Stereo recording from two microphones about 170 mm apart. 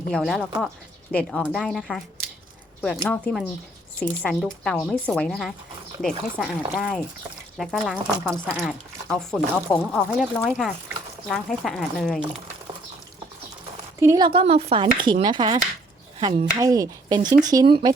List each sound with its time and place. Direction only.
0.1 s a woman's voice: centre (ahead or behind)
8.3 s speech: 10° right (ahead or behind)
9.0 s a woman's voice: 5° left (ahead or behind)
14.0 s speech: 15° right (ahead or behind)
14.3 s speech: 35° right (ahead or behind)
16.2 s speech: 35° right (ahead or behind)
16.6 s speech: 20° right (ahead or behind)